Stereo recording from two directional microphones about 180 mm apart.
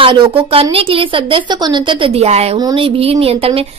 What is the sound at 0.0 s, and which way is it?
A woman's voice, 30° right (ahead or behind).